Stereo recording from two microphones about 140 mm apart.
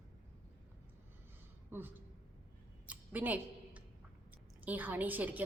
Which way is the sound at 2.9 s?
10° right (ahead or behind).